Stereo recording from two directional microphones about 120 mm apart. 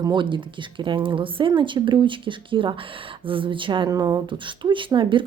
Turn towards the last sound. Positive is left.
turn(degrees=-45)  # may be behind; listen again after turning